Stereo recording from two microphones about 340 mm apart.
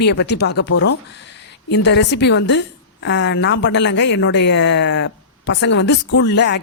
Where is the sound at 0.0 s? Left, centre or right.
Left.